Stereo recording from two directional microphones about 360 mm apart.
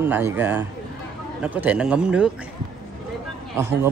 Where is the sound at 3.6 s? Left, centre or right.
Centre.